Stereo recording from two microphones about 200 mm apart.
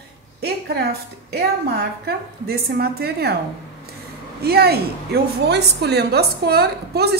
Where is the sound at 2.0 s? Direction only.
50° right (ahead or behind).